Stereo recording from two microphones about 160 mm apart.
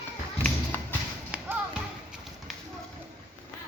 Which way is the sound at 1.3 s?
10° right (ahead or behind).